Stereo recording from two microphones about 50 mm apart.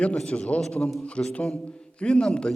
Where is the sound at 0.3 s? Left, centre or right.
Left.